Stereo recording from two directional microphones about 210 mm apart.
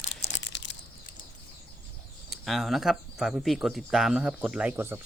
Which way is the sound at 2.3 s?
Centre (ahead or behind).